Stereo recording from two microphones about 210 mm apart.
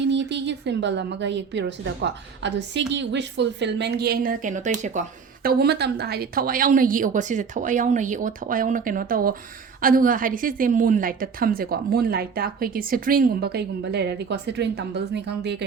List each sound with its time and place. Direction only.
0.0 s a woman's voice: 55° right (ahead or behind)